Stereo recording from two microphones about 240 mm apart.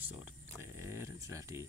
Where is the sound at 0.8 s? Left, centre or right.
Centre.